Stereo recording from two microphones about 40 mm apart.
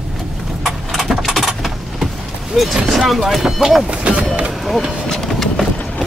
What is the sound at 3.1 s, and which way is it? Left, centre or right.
Speech, centre.